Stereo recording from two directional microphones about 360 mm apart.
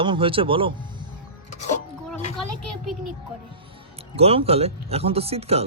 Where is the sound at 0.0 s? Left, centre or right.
Centre.